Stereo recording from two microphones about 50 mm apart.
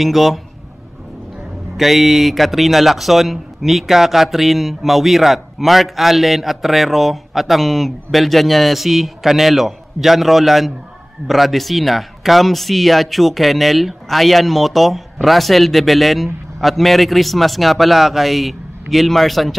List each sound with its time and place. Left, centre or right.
0.0 s a man's voice: centre
1.8 s a man's voice: centre